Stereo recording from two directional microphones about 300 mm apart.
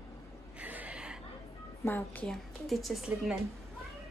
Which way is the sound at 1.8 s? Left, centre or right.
Centre.